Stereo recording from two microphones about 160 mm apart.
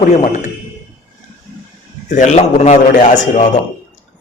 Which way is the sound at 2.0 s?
50° left (ahead or behind).